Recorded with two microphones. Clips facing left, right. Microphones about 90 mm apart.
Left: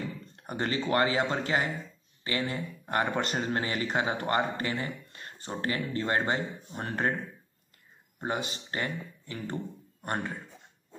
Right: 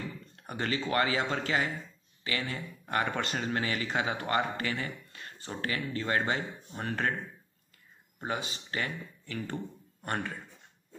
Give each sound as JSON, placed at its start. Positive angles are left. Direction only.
{"t": 0.5, "sound": "speech", "side_deg": 30}
{"t": 8.2, "sound": "speech", "side_deg": 30}
{"t": 10.0, "sound": "speech", "side_deg": 15}